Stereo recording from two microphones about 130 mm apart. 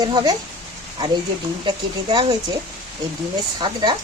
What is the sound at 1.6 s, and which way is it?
Speech, 35° right (ahead or behind).